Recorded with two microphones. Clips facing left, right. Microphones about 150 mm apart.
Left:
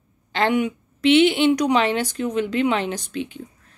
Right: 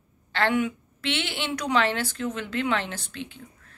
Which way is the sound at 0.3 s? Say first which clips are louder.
Left 4 dB; 15° left (ahead or behind).